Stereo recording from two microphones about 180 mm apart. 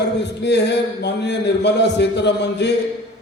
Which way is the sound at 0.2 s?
70° left (ahead or behind).